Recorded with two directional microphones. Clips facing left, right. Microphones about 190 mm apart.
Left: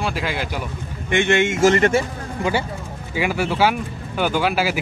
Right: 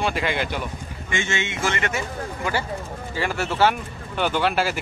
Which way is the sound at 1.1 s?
60° left (ahead or behind).